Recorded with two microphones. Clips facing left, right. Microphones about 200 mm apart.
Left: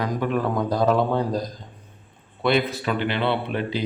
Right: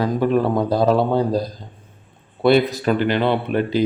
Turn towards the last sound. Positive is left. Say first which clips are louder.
# right 7 dB
turn(degrees=-45)  # may be behind; listen again after turning